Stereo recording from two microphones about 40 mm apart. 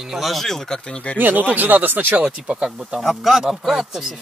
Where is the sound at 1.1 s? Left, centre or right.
Right.